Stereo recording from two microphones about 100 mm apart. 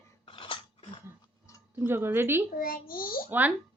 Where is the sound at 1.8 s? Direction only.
25° right (ahead or behind).